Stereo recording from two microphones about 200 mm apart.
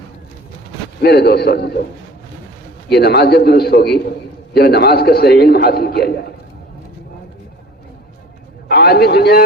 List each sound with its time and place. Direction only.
1.0 s a man's voice: 55° left (ahead or behind)
2.9 s a man's voice: 55° left (ahead or behind)
8.6 s a man's voice: 55° left (ahead or behind)